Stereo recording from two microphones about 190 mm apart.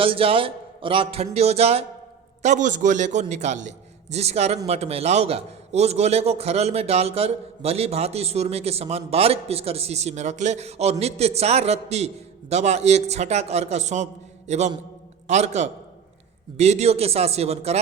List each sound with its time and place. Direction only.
0.0 s a man's voice: 30° right (ahead or behind)